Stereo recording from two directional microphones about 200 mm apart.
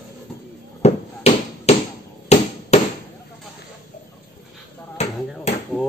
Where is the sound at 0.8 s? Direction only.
35° left (ahead or behind).